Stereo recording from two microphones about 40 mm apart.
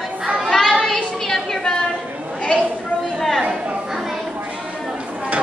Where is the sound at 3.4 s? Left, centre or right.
Right.